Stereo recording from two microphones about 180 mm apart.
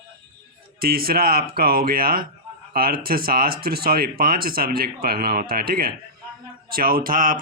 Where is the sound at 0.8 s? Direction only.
55° right (ahead or behind).